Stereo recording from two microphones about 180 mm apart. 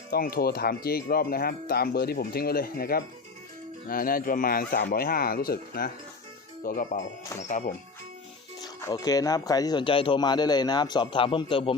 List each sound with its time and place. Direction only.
0.1 s speech: 55° left (ahead or behind)
8.6 s speech: 20° left (ahead or behind)